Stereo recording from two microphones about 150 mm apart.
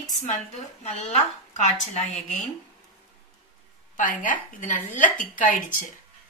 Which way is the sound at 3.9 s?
60° left (ahead or behind).